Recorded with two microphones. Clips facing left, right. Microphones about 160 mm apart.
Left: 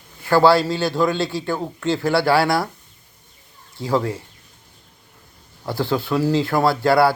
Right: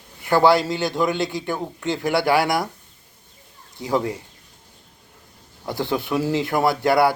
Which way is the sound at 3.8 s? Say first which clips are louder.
Left 1 dB; 20° right (ahead or behind).